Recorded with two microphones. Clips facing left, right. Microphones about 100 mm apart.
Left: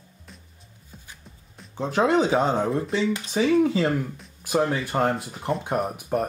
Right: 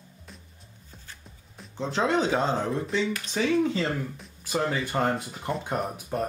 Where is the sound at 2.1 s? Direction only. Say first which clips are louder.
Left 3 dB; 10° left (ahead or behind).